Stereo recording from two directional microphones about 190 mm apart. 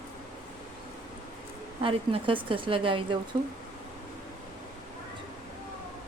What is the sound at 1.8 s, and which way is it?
A woman's voice, 25° right (ahead or behind).